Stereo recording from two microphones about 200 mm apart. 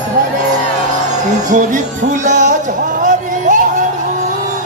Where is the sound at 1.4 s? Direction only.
40° right (ahead or behind).